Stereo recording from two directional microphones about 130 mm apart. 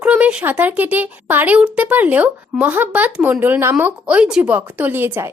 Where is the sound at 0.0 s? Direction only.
10° right (ahead or behind).